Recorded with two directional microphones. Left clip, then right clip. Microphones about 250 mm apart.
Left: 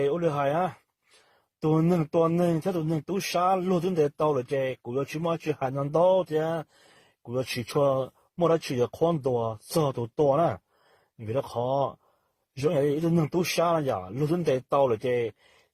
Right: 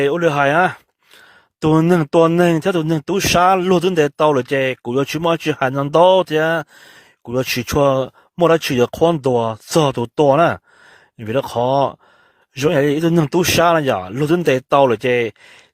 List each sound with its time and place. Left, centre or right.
0.0 s a man's voice: right